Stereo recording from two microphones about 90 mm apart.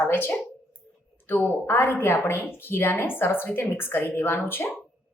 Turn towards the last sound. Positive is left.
turn(degrees=25)  # may be behind; listen again after turning